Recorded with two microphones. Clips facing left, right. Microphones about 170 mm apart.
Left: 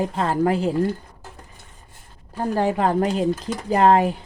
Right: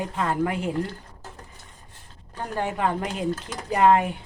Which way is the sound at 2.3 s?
35° left (ahead or behind).